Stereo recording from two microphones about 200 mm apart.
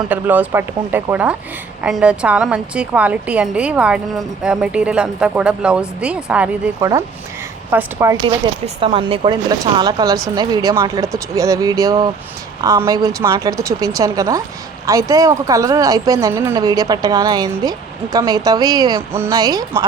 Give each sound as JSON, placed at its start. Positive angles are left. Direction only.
{"t": 0.1, "sound": "a woman's voice", "side_deg": -10}
{"t": 6.7, "sound": "speech", "side_deg": -15}
{"t": 8.6, "sound": "speech", "side_deg": -25}